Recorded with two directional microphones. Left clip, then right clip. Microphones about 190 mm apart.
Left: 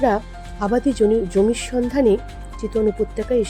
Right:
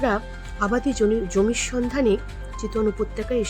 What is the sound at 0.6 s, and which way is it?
Speech, 10° left (ahead or behind).